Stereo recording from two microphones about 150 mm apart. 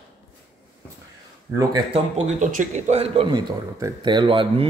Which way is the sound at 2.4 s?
60° right (ahead or behind).